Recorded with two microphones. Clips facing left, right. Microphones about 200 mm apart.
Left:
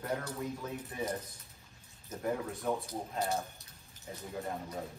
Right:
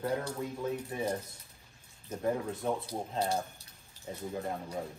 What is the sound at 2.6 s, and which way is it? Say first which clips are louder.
Speech: right 1 dB; 30° right (ahead or behind).